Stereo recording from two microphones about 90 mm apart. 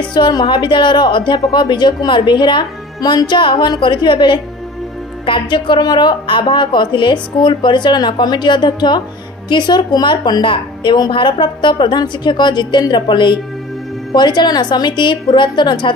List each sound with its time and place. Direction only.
0.1 s a woman's voice: 50° left (ahead or behind)
0.5 s a woman's voice: 65° left (ahead or behind)